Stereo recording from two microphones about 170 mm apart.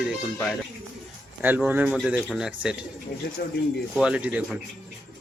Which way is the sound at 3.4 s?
70° left (ahead or behind).